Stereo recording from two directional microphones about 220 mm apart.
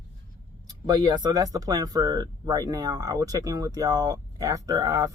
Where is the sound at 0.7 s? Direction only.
15° right (ahead or behind).